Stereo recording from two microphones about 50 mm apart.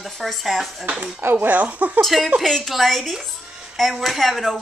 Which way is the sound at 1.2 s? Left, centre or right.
Right.